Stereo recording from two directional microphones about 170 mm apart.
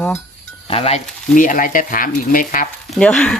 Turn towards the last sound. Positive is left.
turn(degrees=5)  # may be behind; listen again after turning